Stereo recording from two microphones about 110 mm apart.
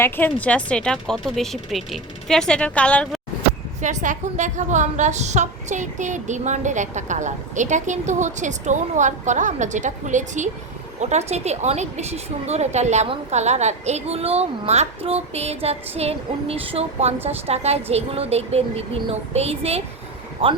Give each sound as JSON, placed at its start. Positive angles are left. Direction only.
{"t": 0.0, "sound": "speech", "side_deg": 15}
{"t": 3.8, "sound": "a woman's voice", "side_deg": -90}
{"t": 20.4, "sound": "speech", "side_deg": -55}